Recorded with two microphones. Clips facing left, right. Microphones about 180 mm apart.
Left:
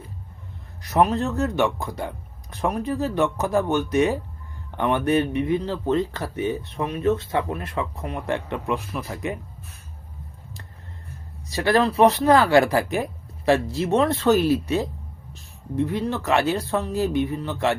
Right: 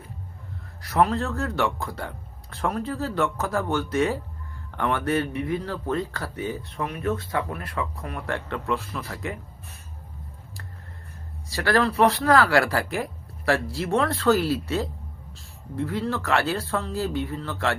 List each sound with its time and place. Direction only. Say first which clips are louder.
0.8 s speech: left 2 dB; 20° left (ahead or behind)
11.4 s speech: left 3 dB; 20° left (ahead or behind)